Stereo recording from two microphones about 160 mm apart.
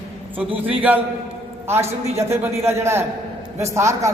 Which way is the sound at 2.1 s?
15° right (ahead or behind).